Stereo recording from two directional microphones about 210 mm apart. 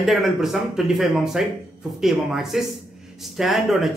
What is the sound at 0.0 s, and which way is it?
Speech, centre (ahead or behind).